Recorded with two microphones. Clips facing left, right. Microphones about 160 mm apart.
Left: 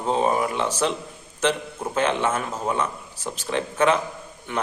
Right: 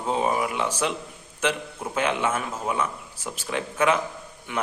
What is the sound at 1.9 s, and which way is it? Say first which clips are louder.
Speech: left 2 dB; 10° right (ahead or behind).